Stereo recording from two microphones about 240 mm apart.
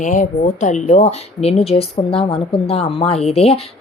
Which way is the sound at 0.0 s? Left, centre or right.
Left.